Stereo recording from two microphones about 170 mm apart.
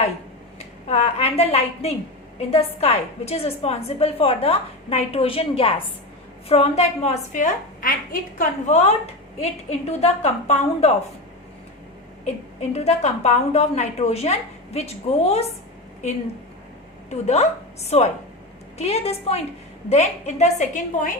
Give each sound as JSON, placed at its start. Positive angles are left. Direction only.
{"t": 0.9, "sound": "a woman's voice", "side_deg": 40}
{"t": 12.2, "sound": "a woman's voice", "side_deg": 40}
{"t": 17.1, "sound": "a woman's voice", "side_deg": 40}